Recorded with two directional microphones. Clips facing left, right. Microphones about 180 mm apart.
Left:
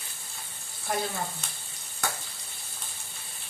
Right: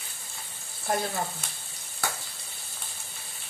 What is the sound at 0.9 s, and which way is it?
Frying, 50° right (ahead or behind).